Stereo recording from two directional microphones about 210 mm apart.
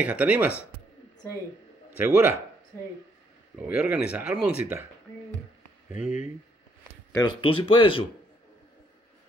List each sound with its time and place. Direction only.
0.0 s speech: 5° right (ahead or behind)
2.0 s speech: 10° right (ahead or behind)
3.5 s speech: 5° right (ahead or behind)
5.9 s speech: 5° right (ahead or behind)
7.2 s speech: 25° left (ahead or behind)